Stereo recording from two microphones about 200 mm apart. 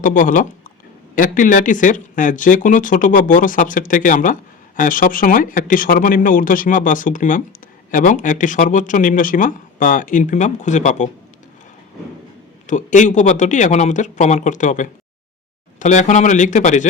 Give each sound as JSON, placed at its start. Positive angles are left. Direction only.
{"t": 0.0, "sound": "speech", "side_deg": 40}
{"t": 12.6, "sound": "speech", "side_deg": 40}